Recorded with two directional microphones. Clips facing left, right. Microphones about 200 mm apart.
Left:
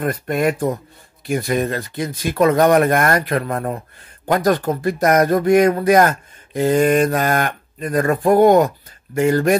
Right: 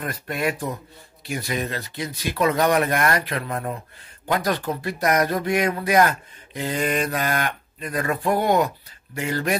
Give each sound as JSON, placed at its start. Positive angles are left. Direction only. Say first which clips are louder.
{"t": 0.0, "sound": "speech", "louder": "left 7 dB", "side_deg": 50}